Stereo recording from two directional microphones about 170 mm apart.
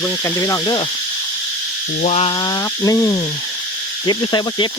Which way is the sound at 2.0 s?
40° left (ahead or behind).